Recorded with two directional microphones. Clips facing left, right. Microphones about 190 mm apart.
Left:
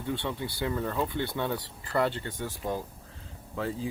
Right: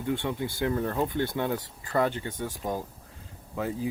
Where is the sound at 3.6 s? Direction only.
15° right (ahead or behind).